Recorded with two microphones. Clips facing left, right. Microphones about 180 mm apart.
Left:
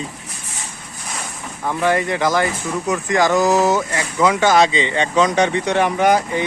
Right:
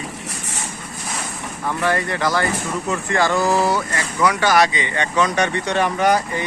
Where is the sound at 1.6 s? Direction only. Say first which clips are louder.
Left 3 dB; 15° left (ahead or behind).